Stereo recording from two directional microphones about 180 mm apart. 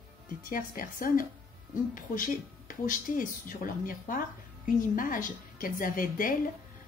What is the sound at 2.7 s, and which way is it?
Speech, 50° left (ahead or behind).